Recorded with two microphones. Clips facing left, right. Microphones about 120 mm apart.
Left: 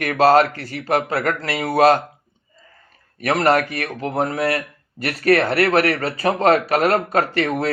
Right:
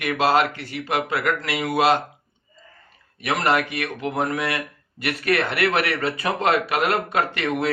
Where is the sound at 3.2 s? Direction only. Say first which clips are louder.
Left 4 dB; 45° left (ahead or behind).